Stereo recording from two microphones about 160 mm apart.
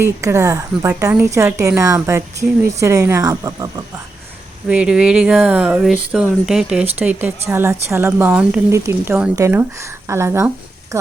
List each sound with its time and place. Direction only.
0.0 s a woman's voice: 20° right (ahead or behind)
4.7 s speech: 5° right (ahead or behind)